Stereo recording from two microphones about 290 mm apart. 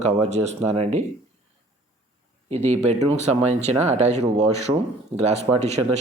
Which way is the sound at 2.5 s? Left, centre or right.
Right.